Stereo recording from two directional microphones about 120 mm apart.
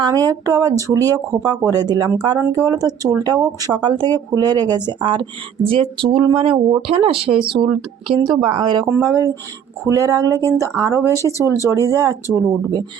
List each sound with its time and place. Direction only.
0.0 s speech: 30° right (ahead or behind)
8.9 s speech: 25° right (ahead or behind)
11.1 s speech: 25° left (ahead or behind)
11.9 s speech: 30° right (ahead or behind)